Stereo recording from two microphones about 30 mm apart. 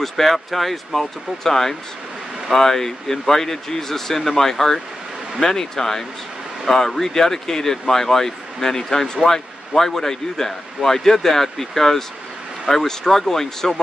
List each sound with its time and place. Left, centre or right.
0.0 s a man's voice: centre